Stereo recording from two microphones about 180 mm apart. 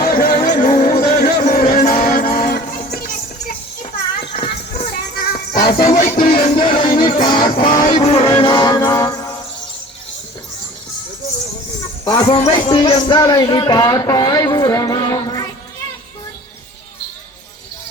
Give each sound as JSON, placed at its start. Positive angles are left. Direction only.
{"t": 0.0, "sound": "music", "side_deg": 50}
{"t": 4.2, "sound": "horse", "side_deg": 30}
{"t": 4.8, "sound": "music", "side_deg": 50}
{"t": 6.4, "sound": "music", "side_deg": 30}
{"t": 7.5, "sound": "music", "side_deg": 50}
{"t": 8.0, "sound": "music", "side_deg": 35}
{"t": 12.0, "sound": "speech", "side_deg": 25}